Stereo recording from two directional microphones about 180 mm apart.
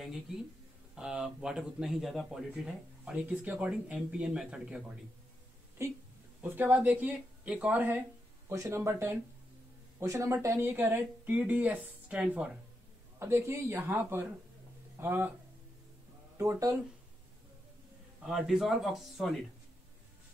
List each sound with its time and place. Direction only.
0.9 s speech: 5° right (ahead or behind)
16.3 s speech: 20° right (ahead or behind)
18.2 s speech: centre (ahead or behind)